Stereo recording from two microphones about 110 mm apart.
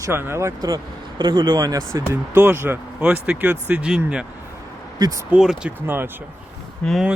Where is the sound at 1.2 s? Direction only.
45° right (ahead or behind); by 4.3 s 5° right (ahead or behind).